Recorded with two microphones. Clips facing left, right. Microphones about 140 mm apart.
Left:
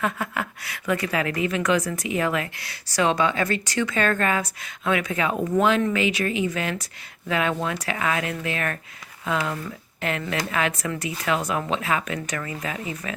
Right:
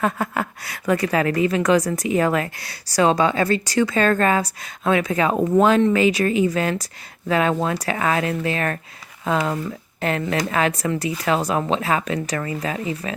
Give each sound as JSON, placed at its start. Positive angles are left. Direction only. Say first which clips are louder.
{"t": 0.0, "sound": "a woman's voice", "louder": "right 4 dB", "side_deg": -40}